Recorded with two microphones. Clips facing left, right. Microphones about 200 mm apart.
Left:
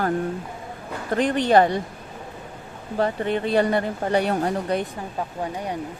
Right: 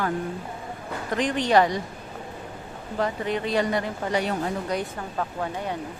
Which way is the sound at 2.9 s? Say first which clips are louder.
Left 4 dB; 35° left (ahead or behind).